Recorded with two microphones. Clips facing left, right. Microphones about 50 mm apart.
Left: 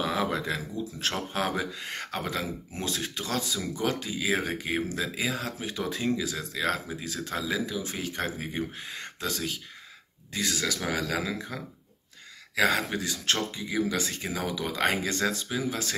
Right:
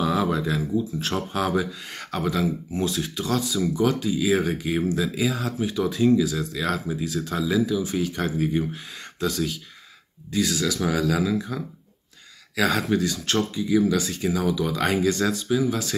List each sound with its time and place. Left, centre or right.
0.0 s a sound: left
0.9 s speech: left
12.5 s speech: left
13.2 s speech: left